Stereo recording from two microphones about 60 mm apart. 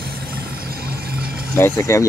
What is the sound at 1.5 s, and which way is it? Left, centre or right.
Speech, left.